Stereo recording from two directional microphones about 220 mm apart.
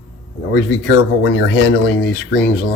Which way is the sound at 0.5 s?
55° left (ahead or behind).